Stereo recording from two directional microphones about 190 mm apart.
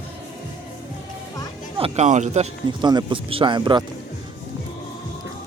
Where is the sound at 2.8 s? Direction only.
25° right (ahead or behind).